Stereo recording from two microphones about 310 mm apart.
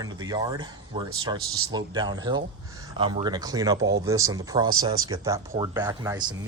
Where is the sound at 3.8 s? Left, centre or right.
Right.